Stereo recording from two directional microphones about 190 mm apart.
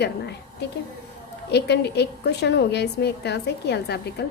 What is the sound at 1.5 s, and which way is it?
A woman's voice, 60° left (ahead or behind).